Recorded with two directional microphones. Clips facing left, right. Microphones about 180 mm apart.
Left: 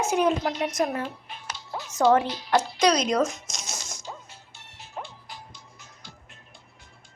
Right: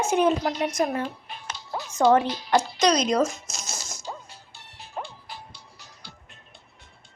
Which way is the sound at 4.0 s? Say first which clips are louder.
Right 3 dB; 35° right (ahead or behind).